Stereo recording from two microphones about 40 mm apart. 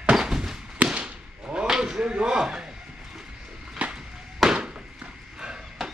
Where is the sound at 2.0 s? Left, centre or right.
Right.